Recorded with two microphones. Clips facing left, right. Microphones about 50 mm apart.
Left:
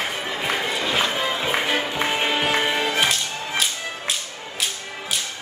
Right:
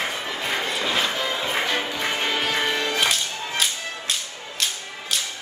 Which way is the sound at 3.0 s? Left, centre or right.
Centre.